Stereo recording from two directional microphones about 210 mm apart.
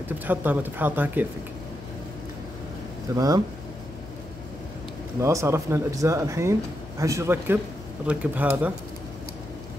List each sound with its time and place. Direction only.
0.3 s speech: 10° right (ahead or behind)
3.2 s speech: 15° right (ahead or behind)
5.2 s speech: 15° right (ahead or behind)